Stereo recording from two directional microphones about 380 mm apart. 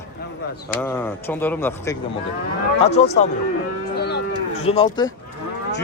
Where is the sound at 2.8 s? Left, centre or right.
Left.